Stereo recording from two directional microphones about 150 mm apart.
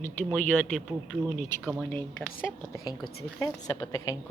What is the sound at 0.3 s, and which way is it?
A woman's voice, 10° left (ahead or behind).